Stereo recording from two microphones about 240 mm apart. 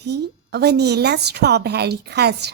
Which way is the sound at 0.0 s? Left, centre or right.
Right.